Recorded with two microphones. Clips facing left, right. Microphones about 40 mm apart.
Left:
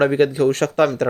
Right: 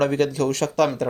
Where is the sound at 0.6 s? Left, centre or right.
Left.